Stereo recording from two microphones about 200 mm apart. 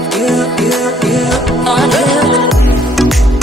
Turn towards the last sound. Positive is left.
turn(degrees=0)  # may be behind; listen again after turning